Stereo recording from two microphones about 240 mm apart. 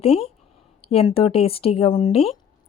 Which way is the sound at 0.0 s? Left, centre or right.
Left.